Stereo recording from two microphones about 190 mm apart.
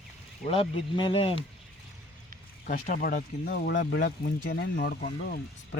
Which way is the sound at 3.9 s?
65° left (ahead or behind).